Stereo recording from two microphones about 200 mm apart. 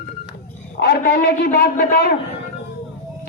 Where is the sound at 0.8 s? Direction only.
55° left (ahead or behind).